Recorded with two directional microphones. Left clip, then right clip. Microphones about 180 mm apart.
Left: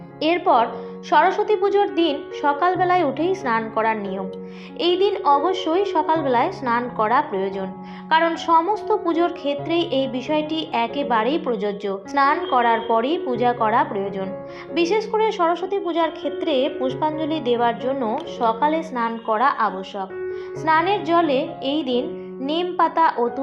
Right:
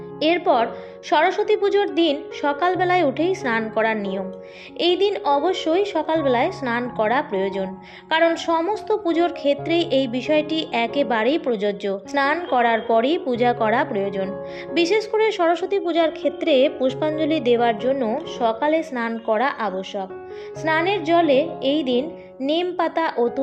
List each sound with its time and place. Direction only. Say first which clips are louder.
0.2 s speech: left 1 dB; 35° right (ahead or behind)